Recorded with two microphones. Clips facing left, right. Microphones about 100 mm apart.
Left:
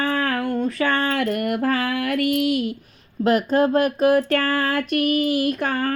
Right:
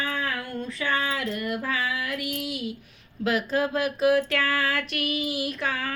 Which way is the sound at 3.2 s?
45° left (ahead or behind).